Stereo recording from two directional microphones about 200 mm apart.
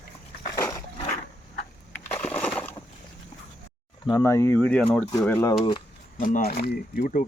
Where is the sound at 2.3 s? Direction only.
5° left (ahead or behind).